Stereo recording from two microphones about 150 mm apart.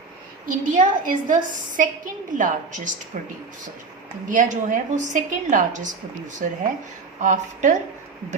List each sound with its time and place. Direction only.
0.4 s a woman's voice: 60° right (ahead or behind)
4.3 s a woman's voice: 60° right (ahead or behind)